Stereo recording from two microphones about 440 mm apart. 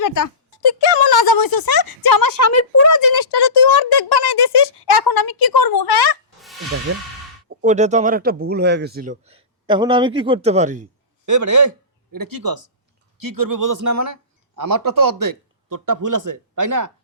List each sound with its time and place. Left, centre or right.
0.0 s speech: left
0.6 s a sound: left
3.2 s a sound: left
6.9 s speech: right
7.6 s speech: centre
11.3 s speech: right